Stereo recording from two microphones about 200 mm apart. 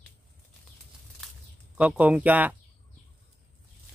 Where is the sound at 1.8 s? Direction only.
5° right (ahead or behind).